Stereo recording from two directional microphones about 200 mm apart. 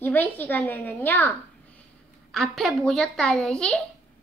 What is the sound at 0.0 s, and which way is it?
A woman's voice, 10° left (ahead or behind).